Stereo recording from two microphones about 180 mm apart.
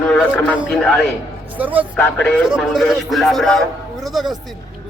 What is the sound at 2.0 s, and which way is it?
A man's voice, 5° left (ahead or behind).